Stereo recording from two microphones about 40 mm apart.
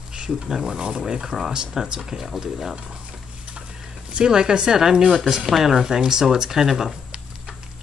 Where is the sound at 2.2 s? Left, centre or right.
Centre.